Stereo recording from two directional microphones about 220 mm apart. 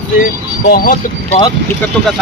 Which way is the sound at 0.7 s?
40° left (ahead or behind).